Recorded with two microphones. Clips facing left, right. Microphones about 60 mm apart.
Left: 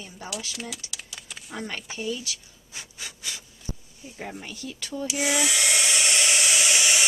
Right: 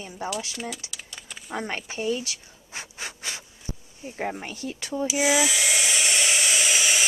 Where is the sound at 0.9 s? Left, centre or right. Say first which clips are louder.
Even; centre.